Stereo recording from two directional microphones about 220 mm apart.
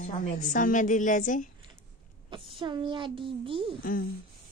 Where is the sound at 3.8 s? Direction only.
40° left (ahead or behind).